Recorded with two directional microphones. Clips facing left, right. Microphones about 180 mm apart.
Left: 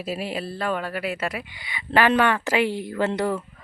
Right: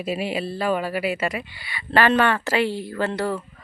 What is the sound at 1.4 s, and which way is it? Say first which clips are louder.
Speech: even; 15° left (ahead or behind).